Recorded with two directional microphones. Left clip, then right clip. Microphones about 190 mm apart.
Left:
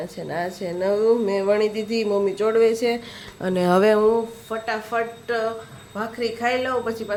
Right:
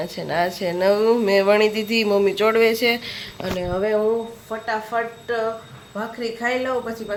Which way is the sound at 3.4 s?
50° left (ahead or behind).